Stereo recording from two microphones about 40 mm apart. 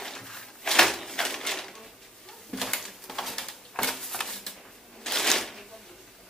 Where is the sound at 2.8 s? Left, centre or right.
Centre.